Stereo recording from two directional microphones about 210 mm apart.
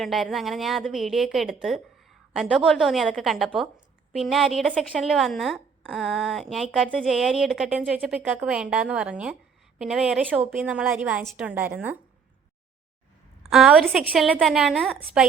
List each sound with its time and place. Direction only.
0.0 s a woman's voice: centre (ahead or behind)
13.4 s a woman's voice: centre (ahead or behind)